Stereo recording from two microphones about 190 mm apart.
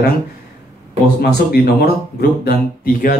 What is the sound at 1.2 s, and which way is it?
Speech, 55° left (ahead or behind).